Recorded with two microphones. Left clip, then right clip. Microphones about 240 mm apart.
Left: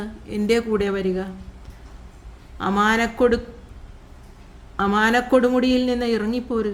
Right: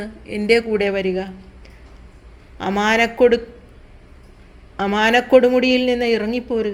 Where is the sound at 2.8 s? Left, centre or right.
Left.